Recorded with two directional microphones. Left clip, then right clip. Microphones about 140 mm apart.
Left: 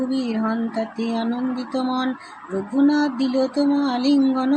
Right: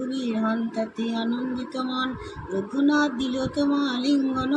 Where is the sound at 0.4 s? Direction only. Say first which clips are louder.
Left 2 dB; 60° left (ahead or behind).